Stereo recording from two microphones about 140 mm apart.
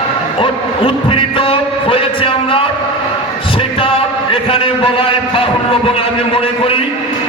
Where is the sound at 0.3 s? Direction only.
40° left (ahead or behind).